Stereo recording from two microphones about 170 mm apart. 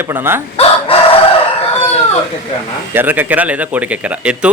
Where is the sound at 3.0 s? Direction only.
10° right (ahead or behind).